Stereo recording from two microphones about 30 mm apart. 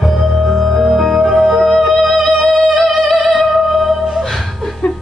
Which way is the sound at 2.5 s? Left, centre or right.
Centre.